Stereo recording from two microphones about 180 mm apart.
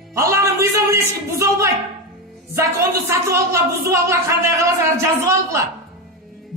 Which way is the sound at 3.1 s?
15° right (ahead or behind).